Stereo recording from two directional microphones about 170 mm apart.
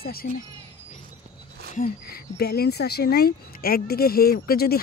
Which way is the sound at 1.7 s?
55° left (ahead or behind).